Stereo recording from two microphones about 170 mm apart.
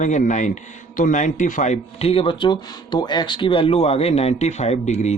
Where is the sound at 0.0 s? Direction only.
45° left (ahead or behind).